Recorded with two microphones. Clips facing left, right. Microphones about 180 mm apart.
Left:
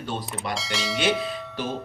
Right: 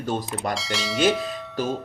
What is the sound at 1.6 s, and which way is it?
Speech, 40° right (ahead or behind).